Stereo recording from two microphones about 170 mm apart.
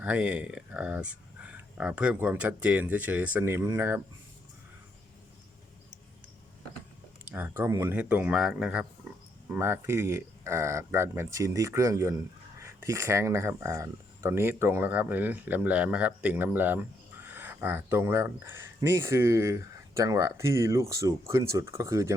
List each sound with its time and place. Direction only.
0.0 s speech: 5° right (ahead or behind)
7.3 s speech: 10° right (ahead or behind)